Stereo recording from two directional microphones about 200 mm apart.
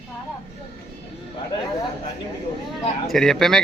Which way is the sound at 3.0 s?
Centre (ahead or behind).